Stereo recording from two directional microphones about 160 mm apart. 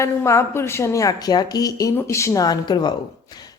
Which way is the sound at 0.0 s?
15° left (ahead or behind).